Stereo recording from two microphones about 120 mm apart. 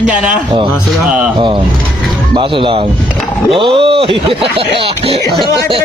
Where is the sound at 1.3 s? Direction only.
40° right (ahead or behind).